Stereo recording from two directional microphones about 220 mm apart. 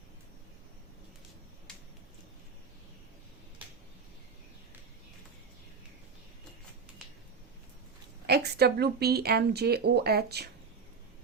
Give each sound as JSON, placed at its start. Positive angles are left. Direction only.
{"t": 8.3, "sound": "speech", "side_deg": -45}